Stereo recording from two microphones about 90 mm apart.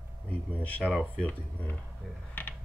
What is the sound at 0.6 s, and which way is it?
Speech, 15° left (ahead or behind).